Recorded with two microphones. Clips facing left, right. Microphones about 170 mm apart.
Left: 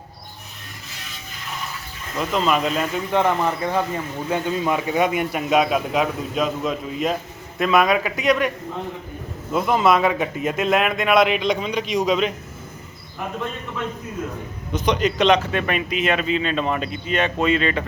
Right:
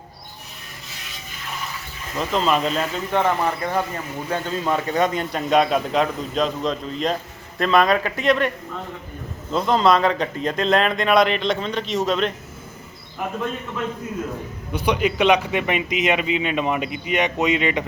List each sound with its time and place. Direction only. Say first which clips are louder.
2.1 s a man's voice: even; centre (ahead or behind)
14.7 s a man's voice: even; 10° right (ahead or behind)